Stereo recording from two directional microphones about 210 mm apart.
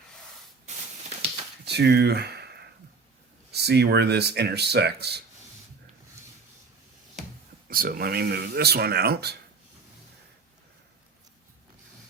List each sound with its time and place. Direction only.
0.7 s a sound: 35° right (ahead or behind)
1.6 s speech: 50° right (ahead or behind)
3.5 s speech: 50° right (ahead or behind)
7.7 s speech: 45° right (ahead or behind)